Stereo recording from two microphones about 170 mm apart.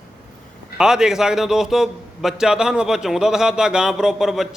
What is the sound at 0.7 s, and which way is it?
A man's voice, 5° right (ahead or behind).